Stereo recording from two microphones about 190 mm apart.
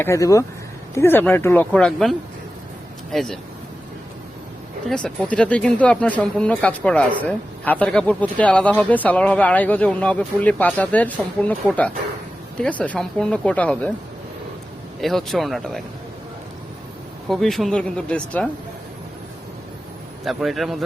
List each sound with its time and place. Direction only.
0.0 s speech: 15° left (ahead or behind)
4.9 s speech: 5° left (ahead or behind)
12.5 s speech: 5° left (ahead or behind)
15.0 s speech: centre (ahead or behind)
17.2 s speech: centre (ahead or behind)
20.2 s speech: centre (ahead or behind)